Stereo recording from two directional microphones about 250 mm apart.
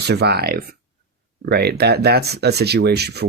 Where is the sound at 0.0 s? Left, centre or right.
Right.